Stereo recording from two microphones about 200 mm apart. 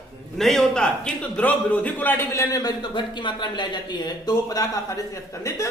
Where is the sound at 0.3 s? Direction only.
Centre (ahead or behind).